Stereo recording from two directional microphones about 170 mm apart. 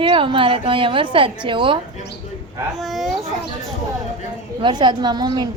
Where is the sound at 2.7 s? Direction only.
Centre (ahead or behind).